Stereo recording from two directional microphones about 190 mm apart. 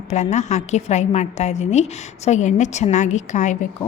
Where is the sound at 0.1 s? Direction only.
35° left (ahead or behind).